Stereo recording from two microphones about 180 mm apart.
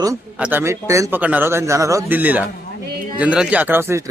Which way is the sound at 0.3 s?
10° right (ahead or behind).